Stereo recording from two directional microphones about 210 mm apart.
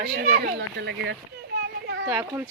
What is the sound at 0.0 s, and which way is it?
Speech, 50° right (ahead or behind).